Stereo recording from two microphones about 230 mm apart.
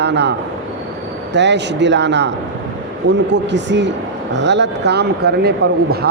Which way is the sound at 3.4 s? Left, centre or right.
Right.